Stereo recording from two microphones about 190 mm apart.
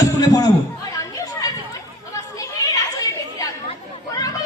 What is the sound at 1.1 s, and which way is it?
Children playing, 20° left (ahead or behind).